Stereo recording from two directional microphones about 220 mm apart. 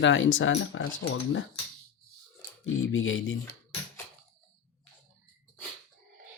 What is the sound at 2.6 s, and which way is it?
Speech, 65° left (ahead or behind).